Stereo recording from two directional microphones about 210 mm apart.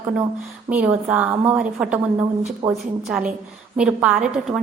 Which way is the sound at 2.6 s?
20° right (ahead or behind).